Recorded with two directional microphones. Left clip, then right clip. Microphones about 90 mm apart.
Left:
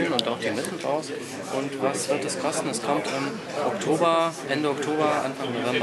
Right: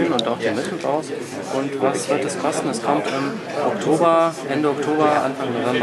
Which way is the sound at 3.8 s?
5° left (ahead or behind).